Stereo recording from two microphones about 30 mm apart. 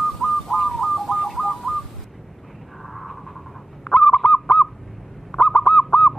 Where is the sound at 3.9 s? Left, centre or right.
Left.